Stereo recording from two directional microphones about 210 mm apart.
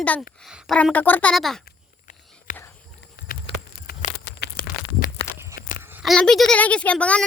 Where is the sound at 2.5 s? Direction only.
35° left (ahead or behind).